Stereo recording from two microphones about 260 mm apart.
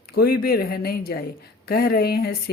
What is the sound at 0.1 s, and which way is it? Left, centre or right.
Speech, left.